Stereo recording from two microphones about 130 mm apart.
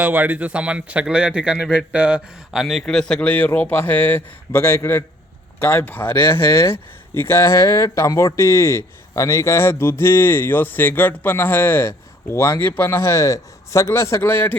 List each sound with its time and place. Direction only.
0.0 s speech: 15° right (ahead or behind); by 14.5 s 15° left (ahead or behind)